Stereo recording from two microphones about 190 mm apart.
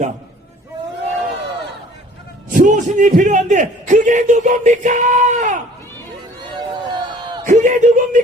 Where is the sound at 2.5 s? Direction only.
45° right (ahead or behind).